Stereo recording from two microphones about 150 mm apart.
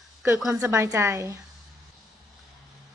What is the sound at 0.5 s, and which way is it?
Speech, 20° right (ahead or behind).